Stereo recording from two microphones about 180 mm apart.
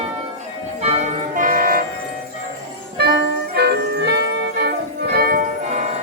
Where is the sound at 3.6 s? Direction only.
65° right (ahead or behind).